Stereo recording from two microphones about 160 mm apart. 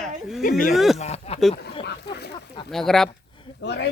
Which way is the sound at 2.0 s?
90° left.